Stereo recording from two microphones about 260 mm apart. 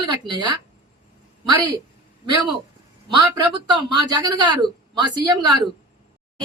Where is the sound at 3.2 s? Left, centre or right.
Centre.